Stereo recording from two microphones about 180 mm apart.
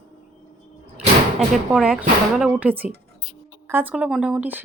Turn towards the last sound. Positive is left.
turn(degrees=-10)  # may be behind; listen again after turning